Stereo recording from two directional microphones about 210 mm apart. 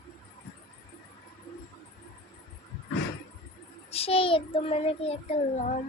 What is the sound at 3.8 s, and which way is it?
Child singing, 30° left (ahead or behind).